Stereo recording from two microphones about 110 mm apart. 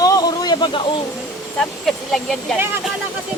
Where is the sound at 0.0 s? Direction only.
35° left (ahead or behind).